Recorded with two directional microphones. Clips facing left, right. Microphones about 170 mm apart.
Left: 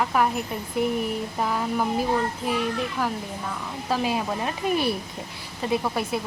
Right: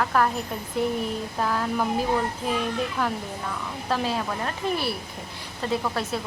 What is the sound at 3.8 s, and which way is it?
Speech, 10° left (ahead or behind).